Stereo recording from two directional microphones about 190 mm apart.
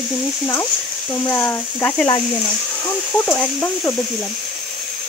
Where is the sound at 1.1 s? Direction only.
15° left (ahead or behind).